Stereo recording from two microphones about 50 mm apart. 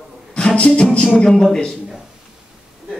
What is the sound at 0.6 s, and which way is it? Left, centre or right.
Music, centre.